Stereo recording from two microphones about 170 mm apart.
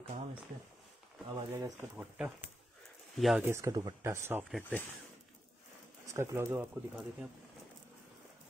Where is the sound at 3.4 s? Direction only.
15° right (ahead or behind).